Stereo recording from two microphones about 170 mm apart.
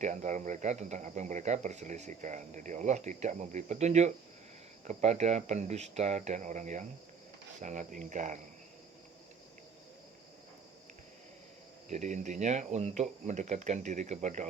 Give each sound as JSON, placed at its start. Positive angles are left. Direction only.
{"t": 0.0, "sound": "speech", "side_deg": -45}
{"t": 11.9, "sound": "speech", "side_deg": -45}